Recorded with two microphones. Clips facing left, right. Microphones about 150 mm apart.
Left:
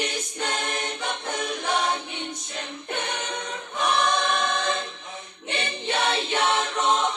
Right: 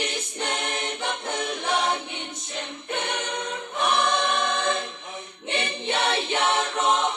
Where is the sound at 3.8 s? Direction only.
25° right (ahead or behind).